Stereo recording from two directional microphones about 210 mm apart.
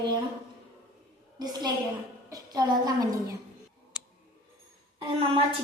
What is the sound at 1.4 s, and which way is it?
Speech, 20° right (ahead or behind).